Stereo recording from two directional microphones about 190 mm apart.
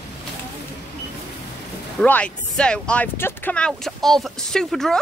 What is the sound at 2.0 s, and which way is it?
Speech, 5° left (ahead or behind).